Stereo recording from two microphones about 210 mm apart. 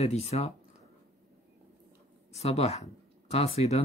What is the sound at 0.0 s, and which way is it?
Speech, 30° left (ahead or behind).